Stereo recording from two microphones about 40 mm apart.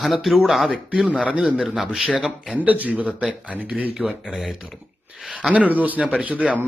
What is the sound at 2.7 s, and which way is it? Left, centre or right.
Speech, right.